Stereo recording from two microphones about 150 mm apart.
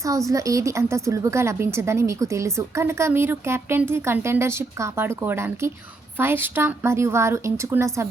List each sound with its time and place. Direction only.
0.3 s a woman's voice: 20° right (ahead or behind)